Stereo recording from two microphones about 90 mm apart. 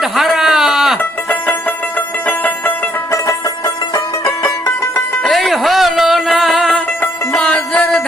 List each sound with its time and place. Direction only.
0.0 s a sound: 5° right (ahead or behind)
1.3 s music: 20° left (ahead or behind)
3.1 s music: 35° left (ahead or behind)
5.2 s music: centre (ahead or behind)
7.0 s music: 15° left (ahead or behind)